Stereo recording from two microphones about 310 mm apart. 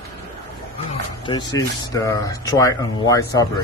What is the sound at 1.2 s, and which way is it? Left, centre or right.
Speech, centre.